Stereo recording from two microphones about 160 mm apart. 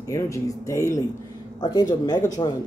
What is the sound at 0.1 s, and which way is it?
Speech, 20° left (ahead or behind).